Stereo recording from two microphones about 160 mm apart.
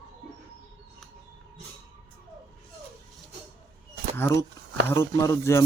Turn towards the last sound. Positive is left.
turn(degrees=20)  # may be behind; listen again after turning